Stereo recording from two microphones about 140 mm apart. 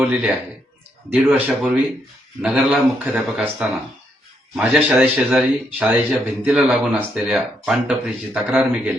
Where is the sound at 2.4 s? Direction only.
10° right (ahead or behind).